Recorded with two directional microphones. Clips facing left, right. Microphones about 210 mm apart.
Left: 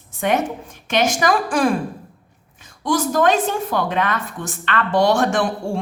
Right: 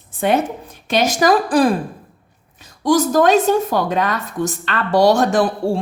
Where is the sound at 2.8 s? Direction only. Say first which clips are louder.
Right 4 dB; 40° right (ahead or behind).